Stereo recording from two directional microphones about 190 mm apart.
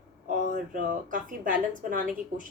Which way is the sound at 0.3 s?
45° right (ahead or behind).